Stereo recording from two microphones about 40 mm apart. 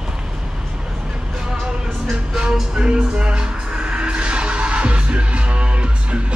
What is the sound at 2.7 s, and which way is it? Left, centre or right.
Music, right.